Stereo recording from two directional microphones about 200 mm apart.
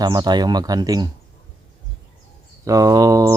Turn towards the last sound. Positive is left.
turn(degrees=-15)  # may be behind; listen again after turning